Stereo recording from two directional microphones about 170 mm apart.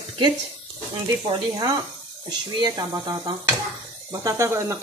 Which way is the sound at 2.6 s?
25° right (ahead or behind).